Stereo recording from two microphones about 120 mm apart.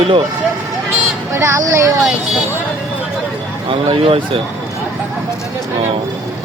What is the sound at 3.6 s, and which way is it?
Speech, 50° right (ahead or behind).